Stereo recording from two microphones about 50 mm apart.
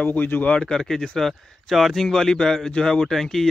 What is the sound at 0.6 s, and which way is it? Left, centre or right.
Speech, centre.